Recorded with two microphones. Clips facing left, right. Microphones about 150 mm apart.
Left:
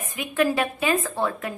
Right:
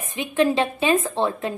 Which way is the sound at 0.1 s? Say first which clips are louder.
Right 3 dB; 25° right (ahead or behind).